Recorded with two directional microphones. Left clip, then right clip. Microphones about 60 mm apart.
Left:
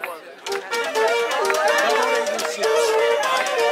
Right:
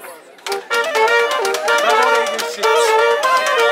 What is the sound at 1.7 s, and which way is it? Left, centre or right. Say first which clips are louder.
Music: right 5 dB; right.